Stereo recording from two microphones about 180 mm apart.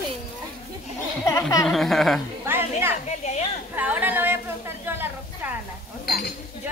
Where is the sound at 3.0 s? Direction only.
40° left (ahead or behind).